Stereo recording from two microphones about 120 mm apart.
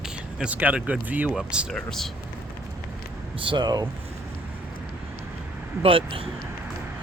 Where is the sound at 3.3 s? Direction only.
40° right (ahead or behind).